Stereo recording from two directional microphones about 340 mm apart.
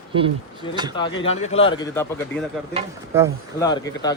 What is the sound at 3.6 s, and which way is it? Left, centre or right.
Speech, centre.